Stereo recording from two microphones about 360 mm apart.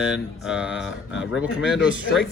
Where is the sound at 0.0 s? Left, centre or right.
Centre.